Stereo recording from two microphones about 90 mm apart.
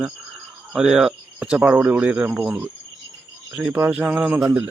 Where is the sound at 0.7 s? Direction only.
5° right (ahead or behind).